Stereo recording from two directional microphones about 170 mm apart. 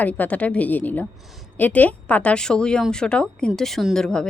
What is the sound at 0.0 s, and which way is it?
A woman's voice, 10° left (ahead or behind).